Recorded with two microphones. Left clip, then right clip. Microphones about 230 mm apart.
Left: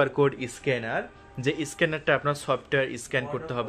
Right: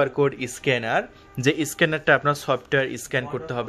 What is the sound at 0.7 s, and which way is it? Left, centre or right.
Speech, centre.